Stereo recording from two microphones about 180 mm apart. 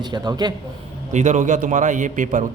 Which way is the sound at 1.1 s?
40° right (ahead or behind).